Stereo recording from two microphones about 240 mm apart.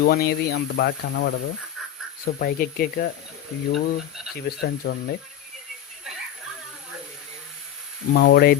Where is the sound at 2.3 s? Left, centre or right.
Left.